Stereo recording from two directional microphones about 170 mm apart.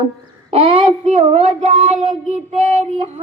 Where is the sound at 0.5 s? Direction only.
30° right (ahead or behind).